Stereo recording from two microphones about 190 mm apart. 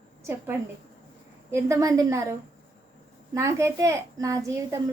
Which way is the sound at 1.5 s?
15° right (ahead or behind).